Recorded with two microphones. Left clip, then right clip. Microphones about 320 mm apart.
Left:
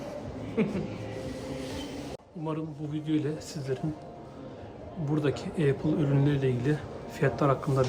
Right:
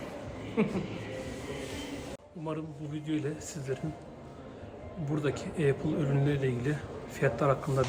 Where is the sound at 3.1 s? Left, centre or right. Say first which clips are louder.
Left 4 dB; centre.